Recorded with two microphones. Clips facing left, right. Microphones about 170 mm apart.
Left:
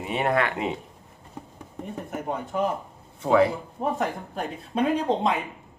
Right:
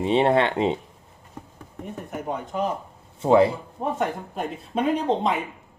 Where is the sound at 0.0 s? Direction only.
25° right (ahead or behind).